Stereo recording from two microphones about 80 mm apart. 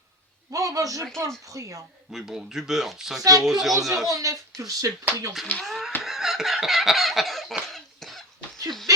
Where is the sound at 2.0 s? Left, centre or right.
Centre.